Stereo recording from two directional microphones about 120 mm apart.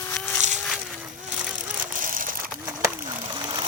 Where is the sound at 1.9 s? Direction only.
90° right.